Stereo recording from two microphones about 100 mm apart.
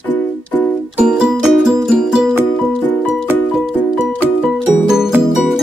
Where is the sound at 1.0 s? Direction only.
5° right (ahead or behind).